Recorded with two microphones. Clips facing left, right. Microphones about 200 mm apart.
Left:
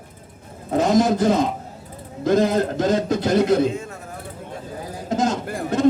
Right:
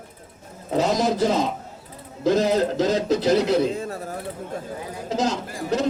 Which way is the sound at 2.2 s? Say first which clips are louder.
Left 1 dB; 50° left (ahead or behind).